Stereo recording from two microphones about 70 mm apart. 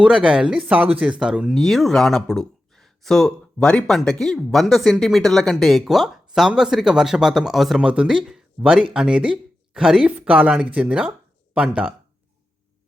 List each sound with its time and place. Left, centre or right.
0.0 s speech: centre
1.2 s speech: centre
1.5 s speech: centre
7.8 s speech: centre